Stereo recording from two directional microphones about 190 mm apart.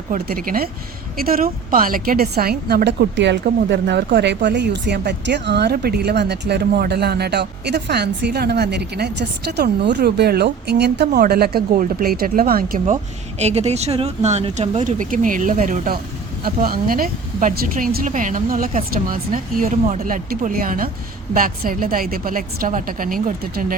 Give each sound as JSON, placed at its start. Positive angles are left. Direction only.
{"t": 0.1, "sound": "a woman's voice", "side_deg": -50}
{"t": 13.4, "sound": "speech", "side_deg": -35}